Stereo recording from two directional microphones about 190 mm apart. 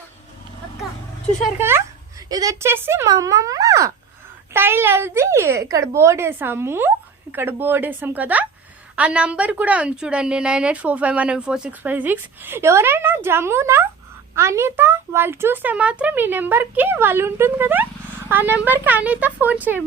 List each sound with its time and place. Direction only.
1.5 s a woman's voice: 10° right (ahead or behind)